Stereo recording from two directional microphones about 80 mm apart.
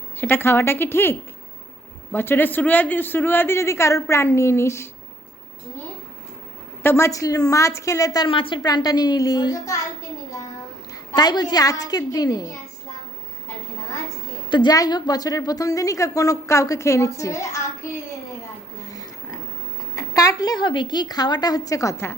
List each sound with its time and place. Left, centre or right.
0.2 s a woman's voice: left
2.1 s speech: left
6.8 s a woman's voice: left
8.3 s speech: left
8.6 s a woman's voice: left
11.1 s a woman's voice: left
14.5 s a woman's voice: left
14.8 s a woman's voice: left
17.8 s a sound: left
20.6 s a woman's voice: left